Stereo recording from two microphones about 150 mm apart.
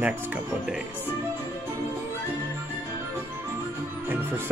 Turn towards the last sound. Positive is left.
turn(degrees=-10)  # may be behind; listen again after turning